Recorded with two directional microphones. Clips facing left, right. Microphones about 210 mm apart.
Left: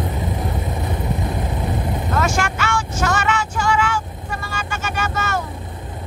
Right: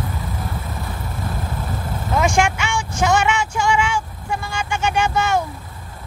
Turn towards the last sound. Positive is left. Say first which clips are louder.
# right 5 dB
turn(degrees=-15)  # may be behind; listen again after turning